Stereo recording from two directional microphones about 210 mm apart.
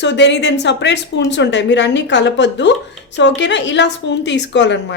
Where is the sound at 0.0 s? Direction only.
55° left (ahead or behind).